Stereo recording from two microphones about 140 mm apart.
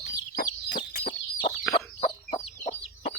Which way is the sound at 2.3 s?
55° left (ahead or behind).